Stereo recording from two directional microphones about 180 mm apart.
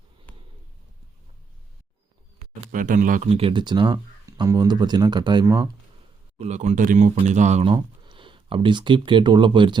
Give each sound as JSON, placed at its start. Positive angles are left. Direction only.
{"t": 0.3, "sound": "a sound", "side_deg": 10}
{"t": 2.7, "sound": "speech", "side_deg": -45}
{"t": 6.4, "sound": "speech", "side_deg": -40}